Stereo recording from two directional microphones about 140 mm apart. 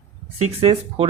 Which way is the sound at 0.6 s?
45° right (ahead or behind).